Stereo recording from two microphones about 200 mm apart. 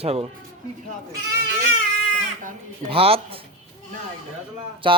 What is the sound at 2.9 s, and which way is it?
Speech, 30° right (ahead or behind).